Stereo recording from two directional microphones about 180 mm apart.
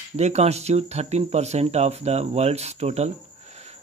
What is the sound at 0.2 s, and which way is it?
Speech, 35° right (ahead or behind).